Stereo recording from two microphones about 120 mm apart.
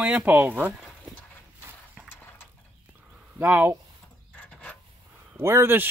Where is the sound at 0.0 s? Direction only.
10° right (ahead or behind).